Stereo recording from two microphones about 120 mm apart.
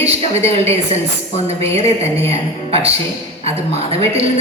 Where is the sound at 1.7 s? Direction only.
60° right (ahead or behind).